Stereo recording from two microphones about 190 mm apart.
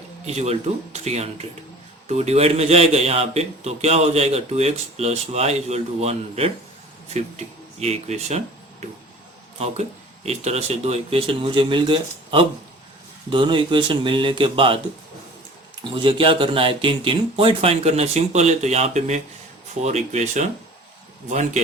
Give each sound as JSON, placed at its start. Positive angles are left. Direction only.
{"t": 0.3, "sound": "a man's voice", "side_deg": -35}
{"t": 10.2, "sound": "speech", "side_deg": -35}
{"t": 15.8, "sound": "a man's voice", "side_deg": -25}